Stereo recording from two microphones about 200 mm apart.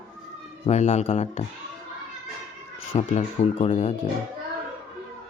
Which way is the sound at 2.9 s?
30° left (ahead or behind).